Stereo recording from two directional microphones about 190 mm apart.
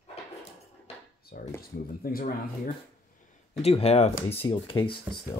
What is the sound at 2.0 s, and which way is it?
Speech, 50° left (ahead or behind).